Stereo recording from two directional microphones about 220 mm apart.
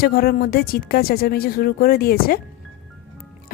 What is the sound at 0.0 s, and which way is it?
A woman's voice, 45° left (ahead or behind).